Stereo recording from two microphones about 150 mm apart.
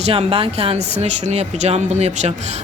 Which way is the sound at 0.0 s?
45° right (ahead or behind).